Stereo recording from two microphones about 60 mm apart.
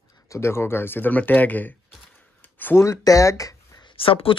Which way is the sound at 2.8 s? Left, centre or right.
Left.